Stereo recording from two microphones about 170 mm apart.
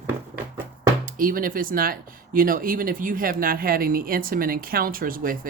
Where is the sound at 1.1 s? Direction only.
55° right (ahead or behind).